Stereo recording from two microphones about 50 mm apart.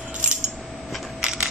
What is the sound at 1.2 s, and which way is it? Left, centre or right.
Coin, centre.